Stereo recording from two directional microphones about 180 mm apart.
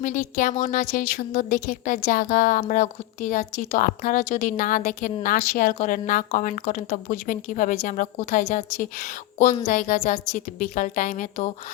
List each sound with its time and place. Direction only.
0.0 s a woman's voice: 45° left (ahead or behind)